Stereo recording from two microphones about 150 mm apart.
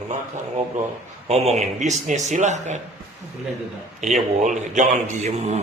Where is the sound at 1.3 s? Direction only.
45° right (ahead or behind).